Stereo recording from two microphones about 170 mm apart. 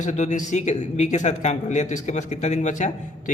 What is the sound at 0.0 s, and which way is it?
Speech, 45° left (ahead or behind).